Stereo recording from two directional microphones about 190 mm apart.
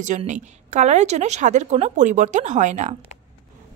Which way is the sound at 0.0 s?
40° right (ahead or behind).